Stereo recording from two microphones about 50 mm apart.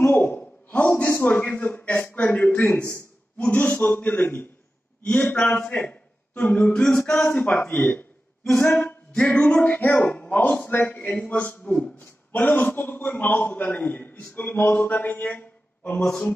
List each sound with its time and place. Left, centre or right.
0.0 s a sound: left
1.2 s a man's voice: left
3.3 s a man's voice: left
5.1 s a man's voice: left
5.5 s a man's voice: left
6.7 s a capella: centre
7.2 s a man's voice: left
8.5 s a capella: centre
9.1 s a man's voice: left